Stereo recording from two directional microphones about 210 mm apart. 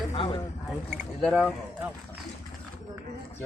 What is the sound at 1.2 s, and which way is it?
Speech, 5° right (ahead or behind).